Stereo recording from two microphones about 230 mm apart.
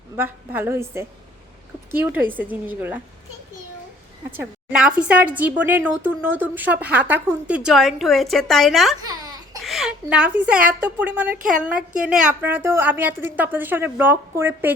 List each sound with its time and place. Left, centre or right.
0.2 s a woman's voice: centre
4.4 s speech: centre
9.0 s a sound: centre
9.6 s a woman's voice: centre